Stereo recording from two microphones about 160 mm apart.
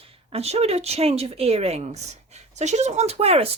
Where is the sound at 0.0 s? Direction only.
35° right (ahead or behind).